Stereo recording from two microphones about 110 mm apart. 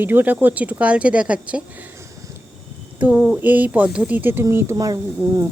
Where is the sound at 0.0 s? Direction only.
15° right (ahead or behind).